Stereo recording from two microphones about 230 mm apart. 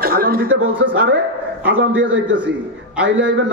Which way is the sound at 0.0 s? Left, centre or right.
Right.